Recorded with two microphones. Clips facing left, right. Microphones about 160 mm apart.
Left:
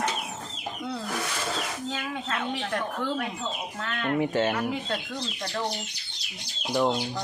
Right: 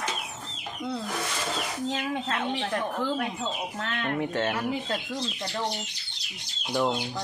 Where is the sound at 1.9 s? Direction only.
30° right (ahead or behind).